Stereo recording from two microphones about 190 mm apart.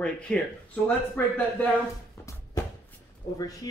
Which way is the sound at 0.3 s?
5° left (ahead or behind).